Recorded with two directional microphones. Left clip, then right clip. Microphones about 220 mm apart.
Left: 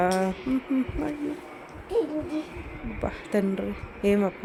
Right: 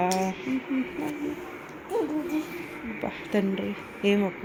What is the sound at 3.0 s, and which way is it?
Speech, 15° left (ahead or behind).